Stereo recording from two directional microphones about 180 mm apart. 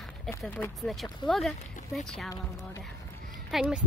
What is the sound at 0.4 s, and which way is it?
Speech, 5° left (ahead or behind).